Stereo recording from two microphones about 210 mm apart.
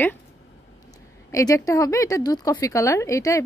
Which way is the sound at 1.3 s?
15° left (ahead or behind).